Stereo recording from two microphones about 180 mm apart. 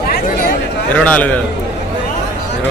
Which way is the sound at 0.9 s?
10° left (ahead or behind).